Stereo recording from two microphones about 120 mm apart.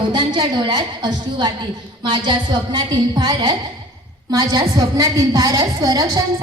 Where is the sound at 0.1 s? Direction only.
40° right (ahead or behind).